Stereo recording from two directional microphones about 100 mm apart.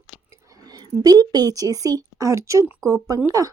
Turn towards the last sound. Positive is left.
turn(degrees=-35)  # may be behind; listen again after turning